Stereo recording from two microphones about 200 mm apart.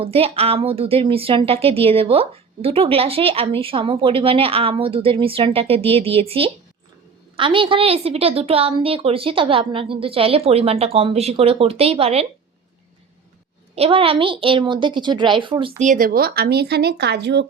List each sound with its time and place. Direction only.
0.0 s speech: 30° right (ahead or behind)
13.7 s speech: 30° right (ahead or behind)
15.8 s speech: 40° right (ahead or behind); by 17.4 s 60° right (ahead or behind)